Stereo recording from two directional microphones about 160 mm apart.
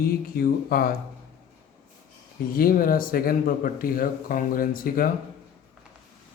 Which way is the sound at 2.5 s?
65° left (ahead or behind).